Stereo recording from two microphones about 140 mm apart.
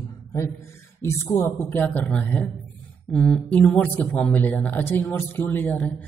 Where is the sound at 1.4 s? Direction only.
15° left (ahead or behind).